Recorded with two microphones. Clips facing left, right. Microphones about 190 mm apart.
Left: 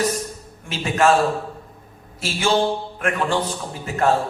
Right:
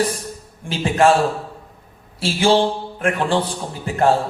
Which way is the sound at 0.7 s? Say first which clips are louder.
Right 3 dB; 30° right (ahead or behind).